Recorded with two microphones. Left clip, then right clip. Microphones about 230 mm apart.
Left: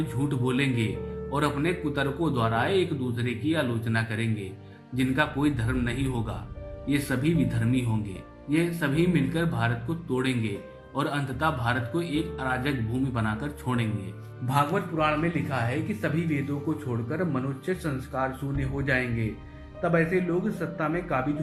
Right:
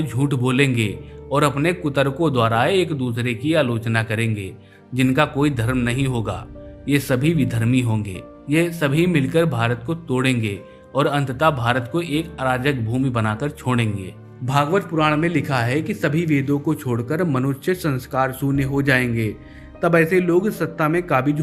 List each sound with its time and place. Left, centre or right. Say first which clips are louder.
0.1 s a man's voice: right 7 dB; right